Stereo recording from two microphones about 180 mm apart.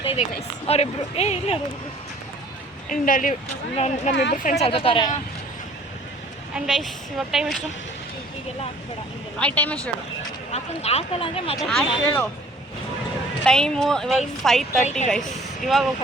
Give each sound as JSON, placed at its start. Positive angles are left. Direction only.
{"t": 0.0, "sound": "speech", "side_deg": 30}
{"t": 2.9, "sound": "speech", "side_deg": 50}
{"t": 3.8, "sound": "speech", "side_deg": 35}
{"t": 4.1, "sound": "speech", "side_deg": 70}
{"t": 4.6, "sound": "speech", "side_deg": 30}
{"t": 6.5, "sound": "a woman's voice", "side_deg": 0}
{"t": 9.6, "sound": "speech", "side_deg": 5}
{"t": 10.5, "sound": "speech", "side_deg": 35}
{"t": 11.5, "sound": "a woman's voice", "side_deg": 5}
{"t": 13.4, "sound": "a woman's voice", "side_deg": 5}
{"t": 14.8, "sound": "speech", "side_deg": 40}
{"t": 15.6, "sound": "a woman's voice", "side_deg": 0}